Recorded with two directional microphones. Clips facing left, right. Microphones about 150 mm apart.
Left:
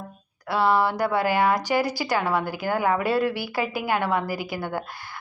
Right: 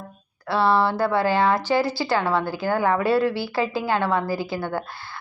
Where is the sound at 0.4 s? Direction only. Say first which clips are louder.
Right 1 dB; 15° left (ahead or behind).